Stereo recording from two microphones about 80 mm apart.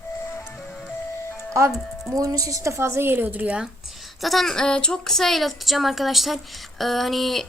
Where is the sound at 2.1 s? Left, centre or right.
Right; by 3.6 s centre.